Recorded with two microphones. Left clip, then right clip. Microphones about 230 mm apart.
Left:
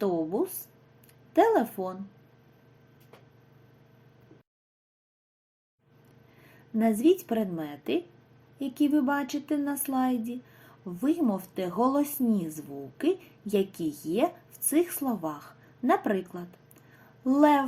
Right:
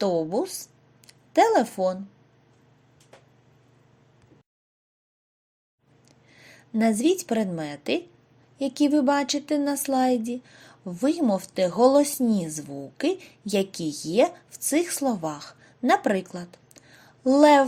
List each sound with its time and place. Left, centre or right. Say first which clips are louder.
0.0 s a woman's voice: right 4 dB; centre
6.7 s a woman's voice: right 1 dB; centre